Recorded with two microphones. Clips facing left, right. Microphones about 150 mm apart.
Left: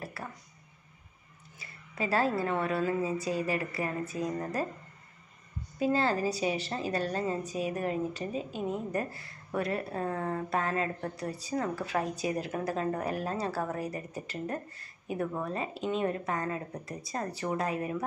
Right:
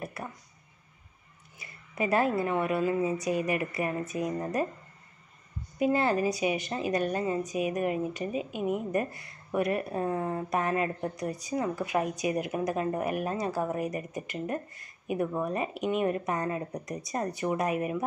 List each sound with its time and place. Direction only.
0.0 s a sound: 20° right (ahead or behind)
1.6 s a woman's voice: 20° right (ahead or behind)
5.8 s a woman's voice: 20° right (ahead or behind)